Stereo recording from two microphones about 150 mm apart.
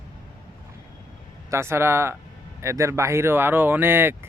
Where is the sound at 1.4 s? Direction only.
15° right (ahead or behind).